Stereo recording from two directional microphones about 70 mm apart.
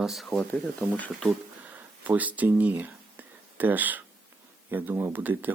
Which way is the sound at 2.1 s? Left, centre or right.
Right.